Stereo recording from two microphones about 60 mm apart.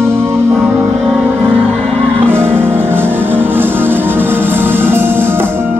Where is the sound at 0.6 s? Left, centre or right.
Centre.